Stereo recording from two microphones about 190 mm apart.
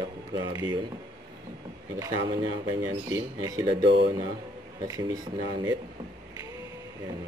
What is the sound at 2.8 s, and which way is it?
Speech, 20° right (ahead or behind).